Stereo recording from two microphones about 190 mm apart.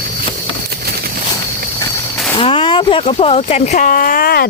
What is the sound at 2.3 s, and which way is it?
Speech, 30° left (ahead or behind).